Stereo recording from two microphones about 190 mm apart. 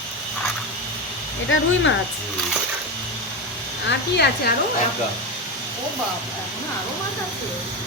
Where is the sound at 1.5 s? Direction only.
80° left.